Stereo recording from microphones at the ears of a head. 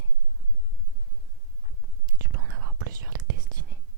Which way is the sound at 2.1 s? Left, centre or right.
Right.